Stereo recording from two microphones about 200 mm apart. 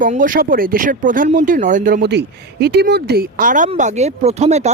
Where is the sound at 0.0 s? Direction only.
45° right (ahead or behind).